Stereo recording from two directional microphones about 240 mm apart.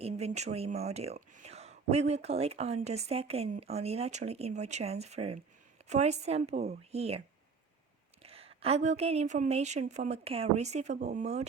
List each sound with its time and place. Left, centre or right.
0.0 s a woman's voice: right
8.2 s a woman's voice: right